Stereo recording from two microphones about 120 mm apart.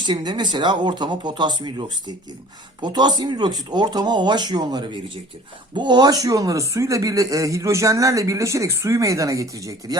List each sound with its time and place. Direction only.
0.0 s speech: 40° right (ahead or behind)